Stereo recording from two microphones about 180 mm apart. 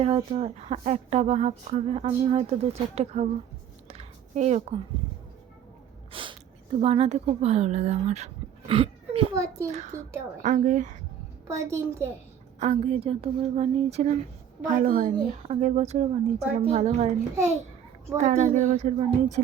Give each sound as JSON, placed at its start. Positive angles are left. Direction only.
{"t": 0.0, "sound": "speech", "side_deg": -35}
{"t": 3.8, "sound": "a sound", "side_deg": -35}
{"t": 6.1, "sound": "a sound", "side_deg": -30}
{"t": 6.7, "sound": "speech", "side_deg": -35}
{"t": 9.3, "sound": "a woman's voice", "side_deg": -15}
{"t": 9.7, "sound": "a woman's voice", "side_deg": -40}
{"t": 11.4, "sound": "a woman's voice", "side_deg": -15}
{"t": 12.5, "sound": "speech", "side_deg": -40}
{"t": 14.7, "sound": "a woman's voice", "side_deg": -50}
{"t": 15.0, "sound": "speech", "side_deg": -35}
{"t": 18.2, "sound": "speech", "side_deg": -40}